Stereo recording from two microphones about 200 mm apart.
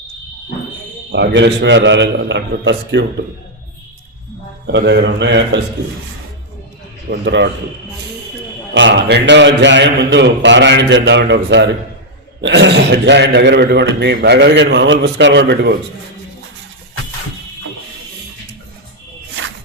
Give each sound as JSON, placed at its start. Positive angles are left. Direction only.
{"t": 1.1, "sound": "a man's voice", "side_deg": -60}
{"t": 4.6, "sound": "a man's voice", "side_deg": -60}
{"t": 7.1, "sound": "a man's voice", "side_deg": -60}
{"t": 8.7, "sound": "a man's voice", "side_deg": -65}